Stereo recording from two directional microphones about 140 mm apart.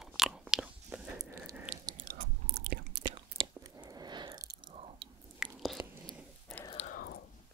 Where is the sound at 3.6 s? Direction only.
25° right (ahead or behind).